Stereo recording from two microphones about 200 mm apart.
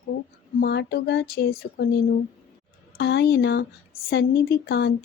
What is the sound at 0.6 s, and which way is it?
Speech, 55° left (ahead or behind).